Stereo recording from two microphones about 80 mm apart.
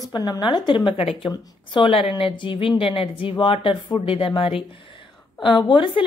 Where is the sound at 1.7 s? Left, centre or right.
Left.